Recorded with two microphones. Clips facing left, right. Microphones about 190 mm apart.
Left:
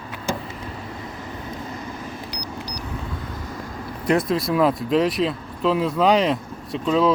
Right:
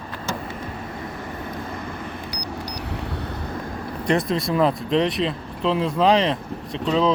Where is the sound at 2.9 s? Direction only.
70° right (ahead or behind).